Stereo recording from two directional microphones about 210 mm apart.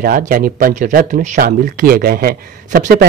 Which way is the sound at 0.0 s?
45° right (ahead or behind).